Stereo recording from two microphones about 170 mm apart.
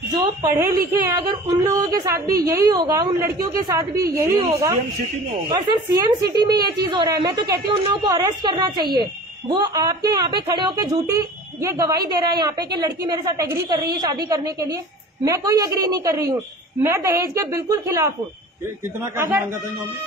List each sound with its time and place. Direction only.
0.4 s a woman's voice: 20° right (ahead or behind)